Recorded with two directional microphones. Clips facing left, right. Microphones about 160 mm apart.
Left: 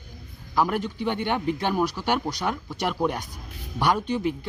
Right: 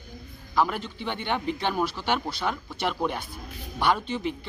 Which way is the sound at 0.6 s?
10° left (ahead or behind).